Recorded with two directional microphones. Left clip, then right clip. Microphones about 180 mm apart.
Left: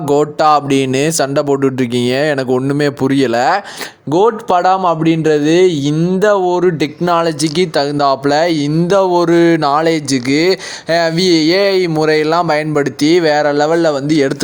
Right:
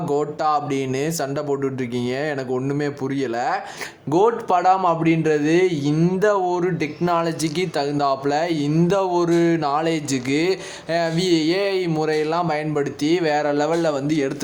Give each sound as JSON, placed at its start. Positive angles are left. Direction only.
{"t": 0.1, "sound": "speech", "side_deg": 45}
{"t": 4.1, "sound": "speech", "side_deg": 35}